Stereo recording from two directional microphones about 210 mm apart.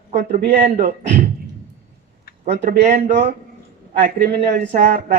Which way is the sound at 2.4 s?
35° right (ahead or behind).